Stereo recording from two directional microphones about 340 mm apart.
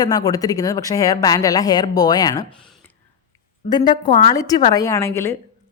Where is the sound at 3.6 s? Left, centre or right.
Centre.